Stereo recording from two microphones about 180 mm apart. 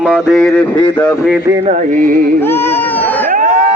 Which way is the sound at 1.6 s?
45° right (ahead or behind).